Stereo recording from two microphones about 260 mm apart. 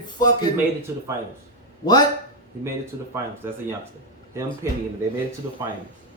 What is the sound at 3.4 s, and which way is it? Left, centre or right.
Speech, centre.